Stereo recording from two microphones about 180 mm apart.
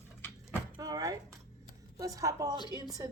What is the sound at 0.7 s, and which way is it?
A woman's voice, 20° right (ahead or behind).